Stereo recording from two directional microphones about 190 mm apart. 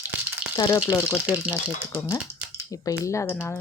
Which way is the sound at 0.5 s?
15° left (ahead or behind).